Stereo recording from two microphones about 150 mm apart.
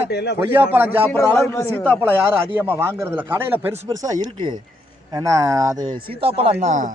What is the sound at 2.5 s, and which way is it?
Speech, 15° right (ahead or behind).